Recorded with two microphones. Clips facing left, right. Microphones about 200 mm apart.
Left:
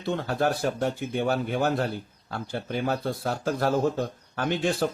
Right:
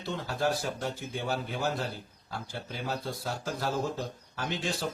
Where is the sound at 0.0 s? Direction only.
55° left (ahead or behind).